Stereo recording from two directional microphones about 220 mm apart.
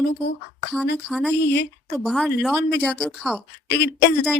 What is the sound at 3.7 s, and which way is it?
Speech, 50° left (ahead or behind).